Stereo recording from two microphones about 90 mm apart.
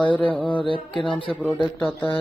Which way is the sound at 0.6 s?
70° left (ahead or behind).